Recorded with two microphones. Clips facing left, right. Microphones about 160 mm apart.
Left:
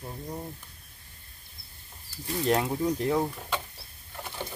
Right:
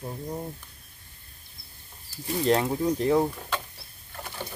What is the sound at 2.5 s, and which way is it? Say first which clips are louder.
Speech: right 2 dB; centre (ahead or behind).